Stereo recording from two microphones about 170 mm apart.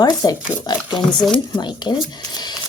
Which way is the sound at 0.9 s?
Centre (ahead or behind).